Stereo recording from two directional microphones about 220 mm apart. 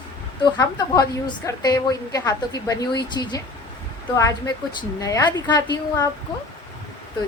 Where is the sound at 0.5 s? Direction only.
15° left (ahead or behind).